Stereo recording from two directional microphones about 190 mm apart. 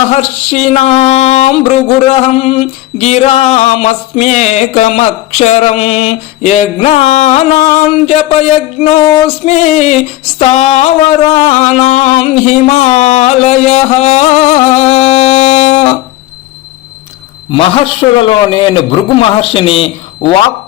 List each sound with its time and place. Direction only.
0.1 s speech: 35° left (ahead or behind)
17.5 s a man's voice: 30° left (ahead or behind)